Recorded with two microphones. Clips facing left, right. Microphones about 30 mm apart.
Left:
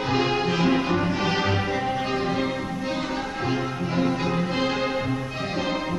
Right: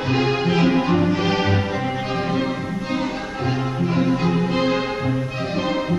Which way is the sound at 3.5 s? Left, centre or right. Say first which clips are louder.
Right 6 dB; centre.